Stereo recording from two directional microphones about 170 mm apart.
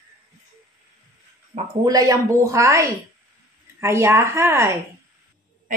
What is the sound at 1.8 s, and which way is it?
A woman's voice, 20° right (ahead or behind).